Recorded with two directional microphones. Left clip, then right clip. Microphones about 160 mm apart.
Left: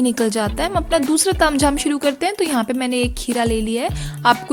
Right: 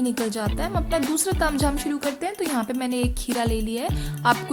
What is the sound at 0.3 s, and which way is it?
Speech, 35° left (ahead or behind).